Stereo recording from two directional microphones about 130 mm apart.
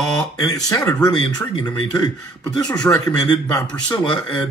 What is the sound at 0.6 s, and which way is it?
Speech, 30° left (ahead or behind).